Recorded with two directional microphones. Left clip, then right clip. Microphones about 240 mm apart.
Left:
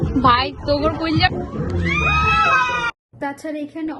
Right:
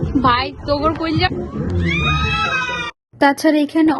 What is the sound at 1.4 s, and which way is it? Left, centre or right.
Speech, left.